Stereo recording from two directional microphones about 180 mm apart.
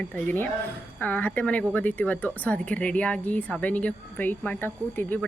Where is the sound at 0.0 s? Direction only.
10° left (ahead or behind).